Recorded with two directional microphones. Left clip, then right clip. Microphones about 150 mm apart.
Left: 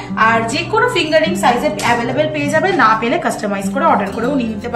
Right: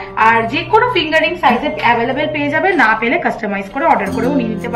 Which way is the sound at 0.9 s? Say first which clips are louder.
Even; 40° left (ahead or behind).